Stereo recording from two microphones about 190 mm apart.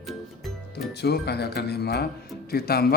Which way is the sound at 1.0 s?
60° left (ahead or behind).